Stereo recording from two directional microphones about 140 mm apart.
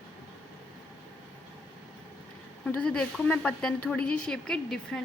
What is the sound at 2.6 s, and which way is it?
A woman's voice, 5° left (ahead or behind).